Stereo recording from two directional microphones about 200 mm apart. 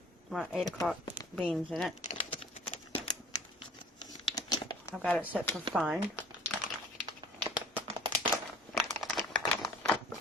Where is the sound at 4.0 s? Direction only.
20° left (ahead or behind).